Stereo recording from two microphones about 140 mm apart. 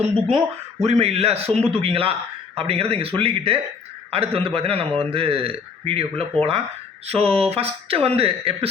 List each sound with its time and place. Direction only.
0.8 s a man's voice: 50° right (ahead or behind)